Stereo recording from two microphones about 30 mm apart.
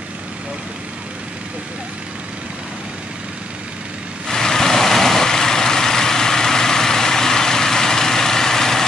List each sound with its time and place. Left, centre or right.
4.3 s vehicle: centre